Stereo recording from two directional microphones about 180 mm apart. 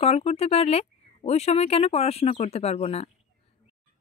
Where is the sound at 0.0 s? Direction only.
35° left (ahead or behind).